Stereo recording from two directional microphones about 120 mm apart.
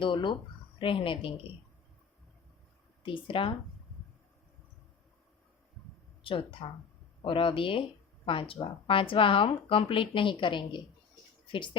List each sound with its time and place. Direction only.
0.0 s speech: 40° left (ahead or behind)
3.0 s speech: 45° left (ahead or behind)
6.2 s speech: 50° left (ahead or behind)